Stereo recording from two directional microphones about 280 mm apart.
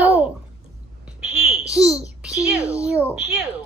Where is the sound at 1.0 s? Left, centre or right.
Centre.